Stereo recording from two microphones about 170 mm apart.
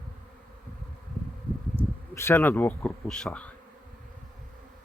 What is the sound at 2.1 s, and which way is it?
Speech, 15° left (ahead or behind).